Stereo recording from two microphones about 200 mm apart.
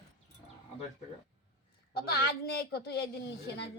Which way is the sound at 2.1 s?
50° left (ahead or behind).